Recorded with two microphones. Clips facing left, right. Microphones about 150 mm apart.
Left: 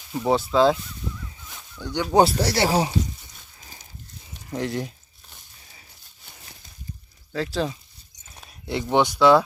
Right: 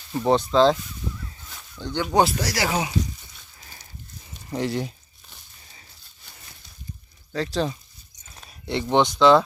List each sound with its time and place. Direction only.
0.1 s speech: 5° left (ahead or behind)
1.5 s a sound: 15° left (ahead or behind)
2.1 s speech: 30° left (ahead or behind)
4.5 s speech: centre (ahead or behind)
7.3 s speech: centre (ahead or behind)
8.4 s a sound: 5° left (ahead or behind)
8.9 s speech: 10° left (ahead or behind)